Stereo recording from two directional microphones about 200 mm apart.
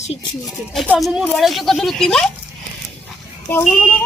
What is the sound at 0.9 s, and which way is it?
Speech, 5° right (ahead or behind).